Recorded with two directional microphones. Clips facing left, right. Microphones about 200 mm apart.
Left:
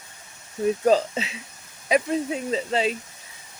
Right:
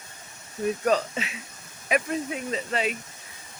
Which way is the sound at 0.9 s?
25° left (ahead or behind).